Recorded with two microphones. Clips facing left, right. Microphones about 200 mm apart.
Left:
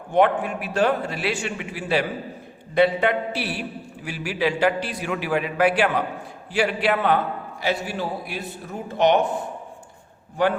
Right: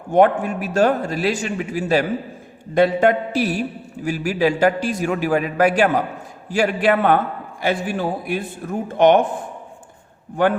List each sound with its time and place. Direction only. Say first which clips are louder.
0.1 s a man's voice: right 4 dB; 45° right (ahead or behind)